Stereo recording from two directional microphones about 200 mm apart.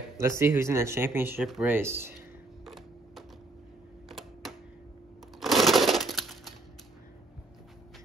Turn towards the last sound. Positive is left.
turn(degrees=0)  # may be behind; listen again after turning